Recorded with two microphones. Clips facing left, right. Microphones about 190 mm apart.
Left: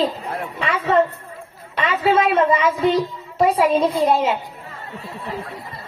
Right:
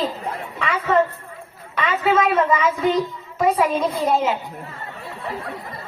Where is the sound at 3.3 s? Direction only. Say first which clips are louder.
Left 3 dB; 30° left (ahead or behind).